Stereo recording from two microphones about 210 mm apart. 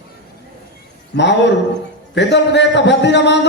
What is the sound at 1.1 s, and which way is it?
A man's voice, 55° left (ahead or behind).